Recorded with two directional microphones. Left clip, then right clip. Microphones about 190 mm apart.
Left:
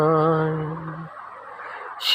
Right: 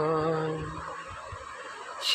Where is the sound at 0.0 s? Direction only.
50° left (ahead or behind).